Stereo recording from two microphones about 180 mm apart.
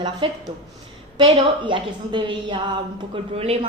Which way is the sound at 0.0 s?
25° right (ahead or behind).